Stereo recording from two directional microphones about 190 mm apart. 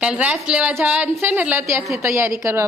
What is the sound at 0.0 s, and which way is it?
A woman's voice, 5° right (ahead or behind).